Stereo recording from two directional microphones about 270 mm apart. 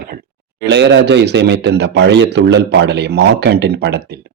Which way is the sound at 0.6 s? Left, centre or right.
Right.